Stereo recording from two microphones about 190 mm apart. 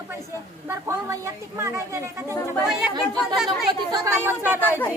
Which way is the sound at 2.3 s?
15° left (ahead or behind).